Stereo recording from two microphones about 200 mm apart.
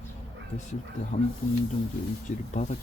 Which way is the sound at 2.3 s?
35° left (ahead or behind).